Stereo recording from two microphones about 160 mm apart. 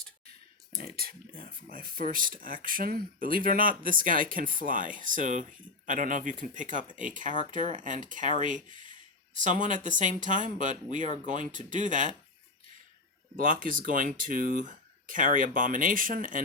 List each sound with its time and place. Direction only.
0.8 s speech: 70° right (ahead or behind); by 8.6 s 50° right (ahead or behind)
8.6 s speech: 30° left (ahead or behind)
9.3 s speech: 50° right (ahead or behind)
13.3 s speech: 60° right (ahead or behind)